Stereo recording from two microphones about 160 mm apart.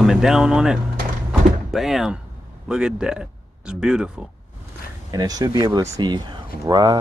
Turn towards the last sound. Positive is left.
turn(degrees=-25)  # may be behind; listen again after turning